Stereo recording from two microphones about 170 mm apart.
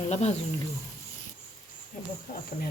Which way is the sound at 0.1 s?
40° left (ahead or behind).